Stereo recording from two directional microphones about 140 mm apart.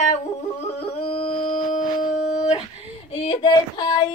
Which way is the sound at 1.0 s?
40° left (ahead or behind).